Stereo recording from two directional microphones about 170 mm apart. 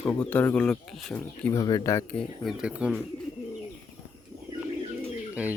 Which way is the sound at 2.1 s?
Centre (ahead or behind).